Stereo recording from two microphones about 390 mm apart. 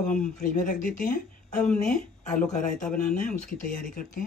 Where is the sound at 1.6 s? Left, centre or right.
Centre.